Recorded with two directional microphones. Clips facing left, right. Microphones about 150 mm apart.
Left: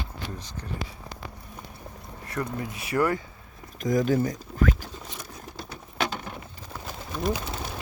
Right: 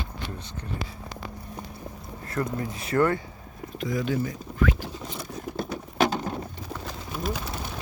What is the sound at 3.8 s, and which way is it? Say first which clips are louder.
Speech: left 4 dB; 45° left (ahead or behind).